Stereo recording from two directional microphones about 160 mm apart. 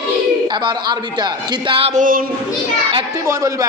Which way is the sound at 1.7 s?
35° right (ahead or behind).